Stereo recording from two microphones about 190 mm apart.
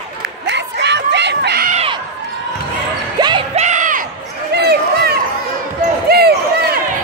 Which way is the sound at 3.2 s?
20° right (ahead or behind).